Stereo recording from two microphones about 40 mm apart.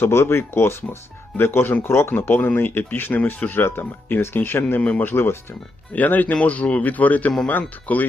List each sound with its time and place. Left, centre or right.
0.0 s speech: left
2.2 s speech: left
4.8 s speech: left
5.0 s speech: left
5.9 s speech: left
6.8 s speech: left